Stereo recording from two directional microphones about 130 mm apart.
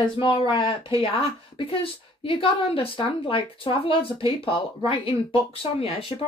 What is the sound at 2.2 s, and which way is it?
A woman's voice, 45° left (ahead or behind).